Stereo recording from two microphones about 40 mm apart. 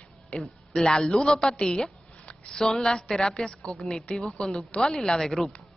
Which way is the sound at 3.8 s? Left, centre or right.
Centre.